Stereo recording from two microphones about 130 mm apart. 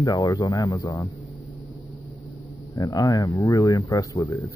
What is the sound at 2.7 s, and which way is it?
Speech, 30° left (ahead or behind).